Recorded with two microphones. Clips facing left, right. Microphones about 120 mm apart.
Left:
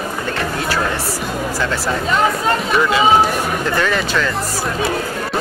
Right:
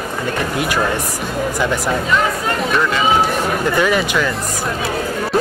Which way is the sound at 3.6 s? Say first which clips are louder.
Right 4 dB; 10° right (ahead or behind).